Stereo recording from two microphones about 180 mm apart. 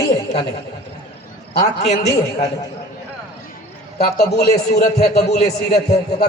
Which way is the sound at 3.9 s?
65° left (ahead or behind).